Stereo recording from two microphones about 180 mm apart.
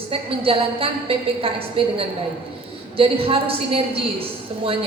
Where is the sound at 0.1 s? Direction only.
30° right (ahead or behind).